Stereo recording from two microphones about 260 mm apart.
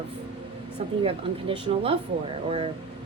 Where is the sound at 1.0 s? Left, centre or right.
Right.